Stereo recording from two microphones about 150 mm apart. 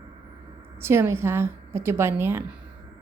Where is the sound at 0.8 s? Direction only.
15° right (ahead or behind).